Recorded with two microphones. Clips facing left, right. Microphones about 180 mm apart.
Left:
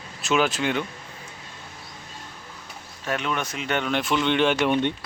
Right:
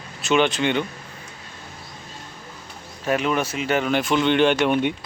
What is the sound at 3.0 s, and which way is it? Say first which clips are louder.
Speech: right 6 dB; 5° right (ahead or behind).